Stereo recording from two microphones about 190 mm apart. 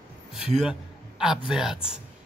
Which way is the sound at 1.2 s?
5° right (ahead or behind).